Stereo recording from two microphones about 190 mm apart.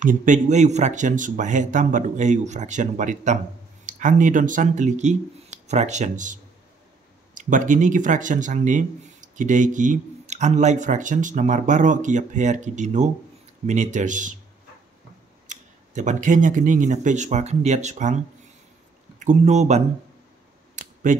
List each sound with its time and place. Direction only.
0.0 s speech: 40° right (ahead or behind)
7.3 s speech: 45° right (ahead or behind)
15.4 s speech: 40° right (ahead or behind)
20.7 s a sound: 40° right (ahead or behind)